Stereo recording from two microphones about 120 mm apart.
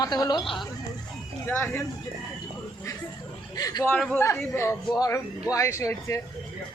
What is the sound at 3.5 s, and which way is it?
Speech, 30° left (ahead or behind).